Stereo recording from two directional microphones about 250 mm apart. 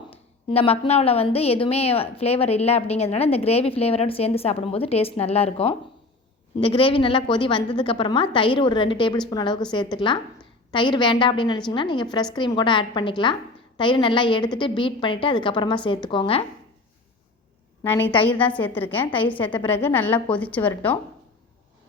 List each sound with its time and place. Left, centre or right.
0.1 s a woman's voice: left
17.8 s a woman's voice: centre
19.4 s a woman's voice: centre
19.7 s a woman's voice: centre